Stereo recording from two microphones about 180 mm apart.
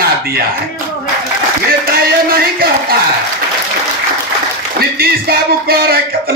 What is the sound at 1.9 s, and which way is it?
A man's voice, 55° right (ahead or behind).